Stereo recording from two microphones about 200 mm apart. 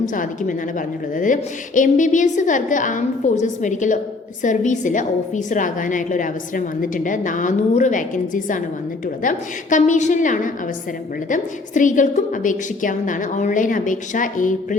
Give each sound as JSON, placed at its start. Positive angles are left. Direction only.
{"t": 0.0, "sound": "a woman's voice", "side_deg": 40}